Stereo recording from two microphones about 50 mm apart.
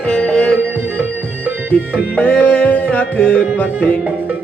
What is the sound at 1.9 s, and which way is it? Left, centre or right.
Music, left.